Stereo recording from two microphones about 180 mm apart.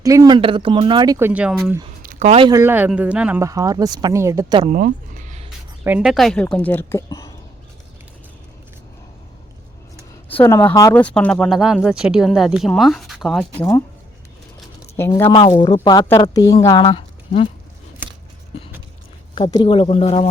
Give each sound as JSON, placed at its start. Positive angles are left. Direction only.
{"t": 0.0, "sound": "speech", "side_deg": -20}
{"t": 1.3, "sound": "speech", "side_deg": -5}
{"t": 2.0, "sound": "a sound", "side_deg": -45}
{"t": 2.5, "sound": "speech", "side_deg": -15}
{"t": 4.7, "sound": "a sound", "side_deg": -45}
{"t": 5.8, "sound": "speech", "side_deg": -5}
{"t": 10.2, "sound": "speech", "side_deg": 10}
{"t": 13.6, "sound": "speech", "side_deg": 15}
{"t": 14.9, "sound": "speech", "side_deg": 10}
{"t": 15.3, "sound": "speech", "side_deg": 30}
{"t": 18.0, "sound": "a sound", "side_deg": -10}
{"t": 19.3, "sound": "speech", "side_deg": 30}